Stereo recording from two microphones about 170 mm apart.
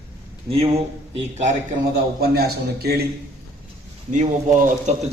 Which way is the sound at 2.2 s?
65° right (ahead or behind).